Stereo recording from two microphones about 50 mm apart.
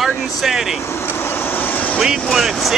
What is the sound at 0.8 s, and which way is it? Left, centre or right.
Speech, left.